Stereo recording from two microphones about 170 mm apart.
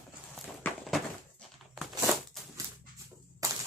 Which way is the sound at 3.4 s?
20° right (ahead or behind).